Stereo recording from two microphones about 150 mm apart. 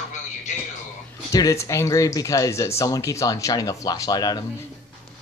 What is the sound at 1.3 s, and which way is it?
Speech, 20° left (ahead or behind).